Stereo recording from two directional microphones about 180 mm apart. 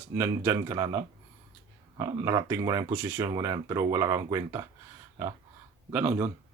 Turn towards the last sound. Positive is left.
turn(degrees=-10)  # may be behind; listen again after turning